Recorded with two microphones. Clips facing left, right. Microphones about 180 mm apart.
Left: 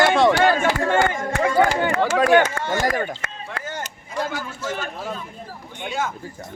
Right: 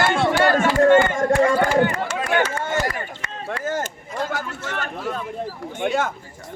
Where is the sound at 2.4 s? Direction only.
50° left (ahead or behind).